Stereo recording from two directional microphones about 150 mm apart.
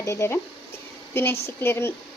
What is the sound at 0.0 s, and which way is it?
A woman's voice, 20° left (ahead or behind).